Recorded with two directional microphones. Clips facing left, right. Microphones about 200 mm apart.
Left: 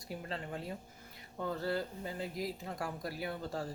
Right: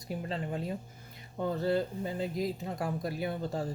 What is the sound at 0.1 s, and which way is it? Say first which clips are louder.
Speech: right 6 dB; 20° right (ahead or behind).